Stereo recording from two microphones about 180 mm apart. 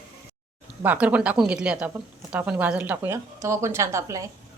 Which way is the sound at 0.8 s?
10° right (ahead or behind).